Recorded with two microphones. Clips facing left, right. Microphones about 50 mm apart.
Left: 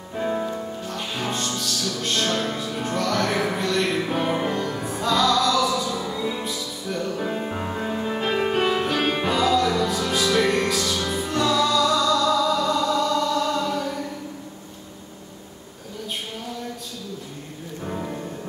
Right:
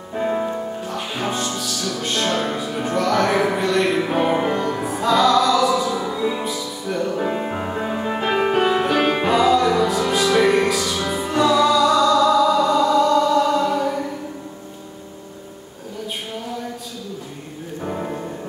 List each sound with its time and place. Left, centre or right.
0.1 s music: centre
17.8 s music: right